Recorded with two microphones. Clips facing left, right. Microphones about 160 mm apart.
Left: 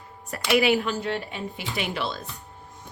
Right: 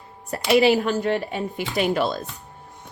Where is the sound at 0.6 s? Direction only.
40° right (ahead or behind).